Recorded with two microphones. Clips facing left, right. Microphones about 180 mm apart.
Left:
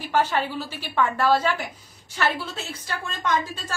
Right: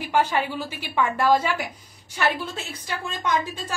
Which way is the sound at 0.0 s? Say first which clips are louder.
Right 1 dB; 10° right (ahead or behind).